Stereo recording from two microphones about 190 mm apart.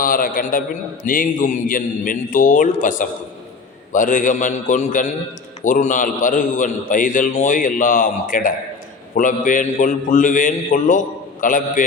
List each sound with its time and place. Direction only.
0.0 s a man's voice: 45° left (ahead or behind)